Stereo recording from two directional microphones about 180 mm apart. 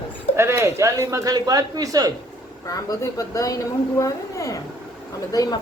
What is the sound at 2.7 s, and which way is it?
A man's voice, 20° left (ahead or behind).